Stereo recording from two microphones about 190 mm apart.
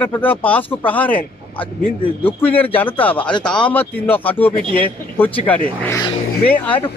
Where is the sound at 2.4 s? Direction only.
10° left (ahead or behind).